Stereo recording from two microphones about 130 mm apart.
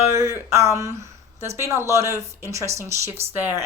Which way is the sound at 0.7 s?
25° right (ahead or behind).